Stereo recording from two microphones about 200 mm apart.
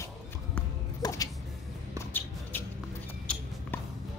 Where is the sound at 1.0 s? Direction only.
20° left (ahead or behind).